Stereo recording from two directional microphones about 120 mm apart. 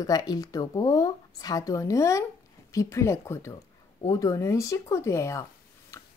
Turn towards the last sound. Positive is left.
turn(degrees=25)  # may be behind; listen again after turning